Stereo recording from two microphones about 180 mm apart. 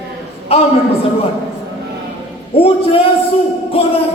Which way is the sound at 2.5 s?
30° left (ahead or behind).